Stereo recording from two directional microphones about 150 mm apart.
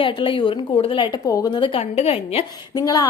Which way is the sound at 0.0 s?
35° left (ahead or behind).